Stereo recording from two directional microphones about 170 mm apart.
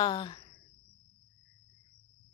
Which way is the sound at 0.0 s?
25° left (ahead or behind).